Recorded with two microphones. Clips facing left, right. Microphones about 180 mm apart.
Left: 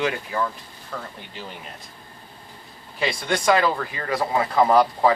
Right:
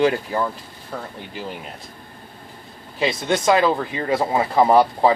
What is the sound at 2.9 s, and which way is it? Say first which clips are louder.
Speech: right 4 dB; 25° right (ahead or behind).